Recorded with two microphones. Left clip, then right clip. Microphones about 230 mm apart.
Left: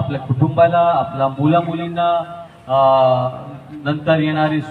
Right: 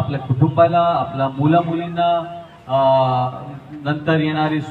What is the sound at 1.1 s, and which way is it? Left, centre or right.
A man's voice, left.